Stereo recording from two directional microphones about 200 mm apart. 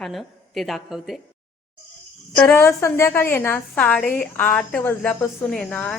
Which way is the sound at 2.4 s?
10° left (ahead or behind).